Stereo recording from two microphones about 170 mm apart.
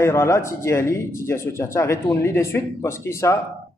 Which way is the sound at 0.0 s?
15° left (ahead or behind).